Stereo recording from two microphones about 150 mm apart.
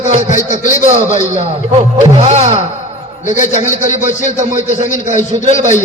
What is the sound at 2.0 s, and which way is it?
Speech, 45° right (ahead or behind).